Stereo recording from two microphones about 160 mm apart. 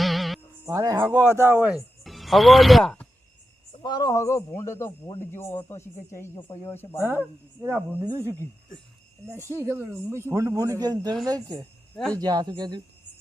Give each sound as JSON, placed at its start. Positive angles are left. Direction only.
{"t": 0.0, "sound": "music", "side_deg": 0}
{"t": 0.6, "sound": "speech", "side_deg": -20}
{"t": 3.8, "sound": "speech", "side_deg": 25}
{"t": 7.0, "sound": "speech", "side_deg": -15}
{"t": 9.3, "sound": "speech", "side_deg": -15}